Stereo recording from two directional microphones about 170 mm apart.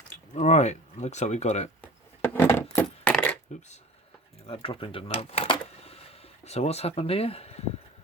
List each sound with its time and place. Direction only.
0.3 s speech: 40° left (ahead or behind)
1.8 s a sound: 10° left (ahead or behind)
2.7 s coin: 10° left (ahead or behind)
4.4 s speech: 35° left (ahead or behind)